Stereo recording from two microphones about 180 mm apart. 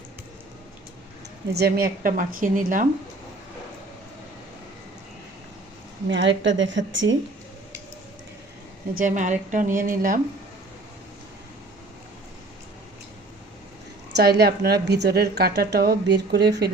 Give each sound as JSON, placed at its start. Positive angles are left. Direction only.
{"t": 1.5, "sound": "a woman's voice", "side_deg": -60}
{"t": 6.1, "sound": "a woman's voice", "side_deg": -90}
{"t": 9.0, "sound": "a woman's voice", "side_deg": -45}
{"t": 14.2, "sound": "a woman's voice", "side_deg": -60}